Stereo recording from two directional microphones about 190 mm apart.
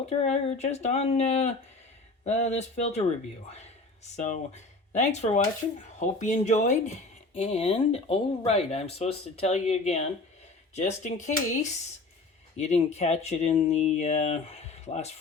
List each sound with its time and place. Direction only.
0.1 s speech: 35° left (ahead or behind)